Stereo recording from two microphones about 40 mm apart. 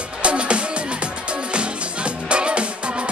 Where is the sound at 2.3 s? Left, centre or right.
Right.